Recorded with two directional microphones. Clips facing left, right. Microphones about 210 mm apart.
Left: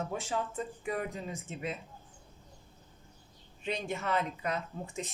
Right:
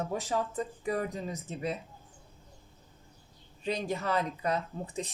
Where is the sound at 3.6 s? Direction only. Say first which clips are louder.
Right 3 dB; 35° right (ahead or behind).